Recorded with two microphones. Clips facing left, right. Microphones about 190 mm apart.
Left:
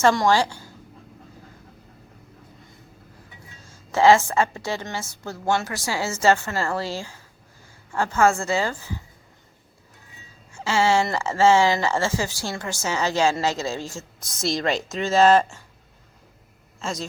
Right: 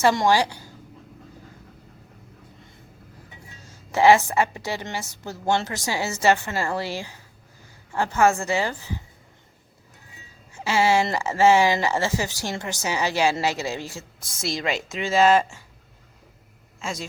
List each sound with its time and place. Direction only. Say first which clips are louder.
0.0 s a woman's voice: left 1 dB; 15° right (ahead or behind)
3.9 s a woman's voice: even; 15° right (ahead or behind)
10.5 s speech: even; 15° right (ahead or behind)
16.8 s speech: left 2 dB; 10° right (ahead or behind)